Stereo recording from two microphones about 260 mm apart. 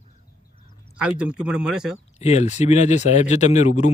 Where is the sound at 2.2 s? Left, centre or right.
Left.